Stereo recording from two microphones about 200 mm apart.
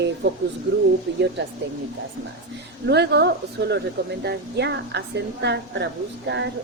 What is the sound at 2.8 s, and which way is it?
A woman's voice, 55° right (ahead or behind).